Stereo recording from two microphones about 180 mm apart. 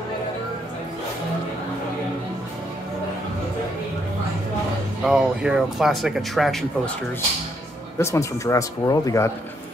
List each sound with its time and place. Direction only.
5.0 s speech: 5° right (ahead or behind)
8.0 s speech: 15° left (ahead or behind)